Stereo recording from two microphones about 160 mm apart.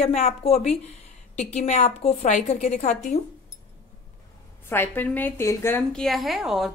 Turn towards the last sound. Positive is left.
turn(degrees=0)  # may be behind; listen again after turning